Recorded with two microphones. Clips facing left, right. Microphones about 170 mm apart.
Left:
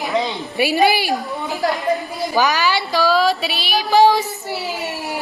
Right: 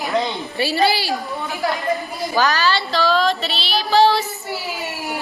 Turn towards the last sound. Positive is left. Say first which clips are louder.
# left 2 dB
turn(degrees=0)  # may be behind; listen again after turning